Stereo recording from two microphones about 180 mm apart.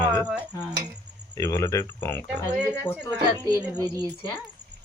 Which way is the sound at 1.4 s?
15° left (ahead or behind).